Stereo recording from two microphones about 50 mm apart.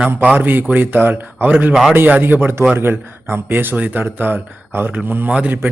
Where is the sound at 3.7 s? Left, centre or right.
Right.